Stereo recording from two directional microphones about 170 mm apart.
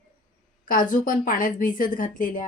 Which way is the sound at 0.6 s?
55° left (ahead or behind).